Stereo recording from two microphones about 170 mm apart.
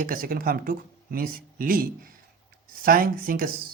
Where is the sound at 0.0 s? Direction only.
55° right (ahead or behind).